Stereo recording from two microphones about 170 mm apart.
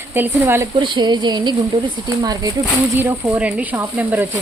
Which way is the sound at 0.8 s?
30° right (ahead or behind).